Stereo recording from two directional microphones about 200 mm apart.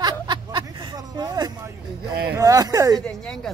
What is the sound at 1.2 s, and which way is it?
Vehicle, 20° right (ahead or behind).